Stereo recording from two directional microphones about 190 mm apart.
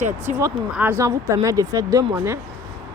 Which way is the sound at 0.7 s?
10° right (ahead or behind).